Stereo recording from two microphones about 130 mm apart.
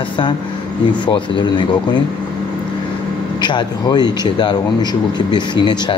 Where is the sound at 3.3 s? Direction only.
35° left (ahead or behind).